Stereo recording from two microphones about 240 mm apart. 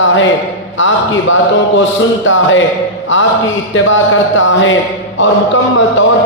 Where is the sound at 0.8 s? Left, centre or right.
Left.